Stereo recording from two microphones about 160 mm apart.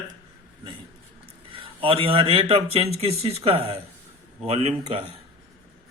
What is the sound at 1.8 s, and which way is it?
Speech, 35° right (ahead or behind).